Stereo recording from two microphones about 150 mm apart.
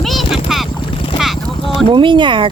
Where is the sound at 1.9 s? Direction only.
35° right (ahead or behind).